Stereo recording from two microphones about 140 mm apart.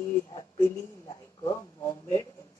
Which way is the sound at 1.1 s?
20° left (ahead or behind).